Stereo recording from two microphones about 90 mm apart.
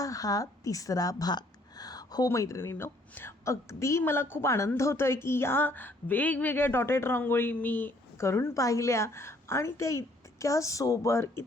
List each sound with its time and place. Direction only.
0.0 s a woman's voice: 40° left (ahead or behind)